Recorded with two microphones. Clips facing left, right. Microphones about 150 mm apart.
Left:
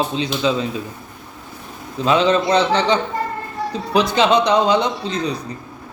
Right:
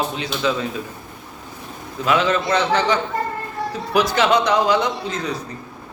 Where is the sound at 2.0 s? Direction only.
25° left (ahead or behind).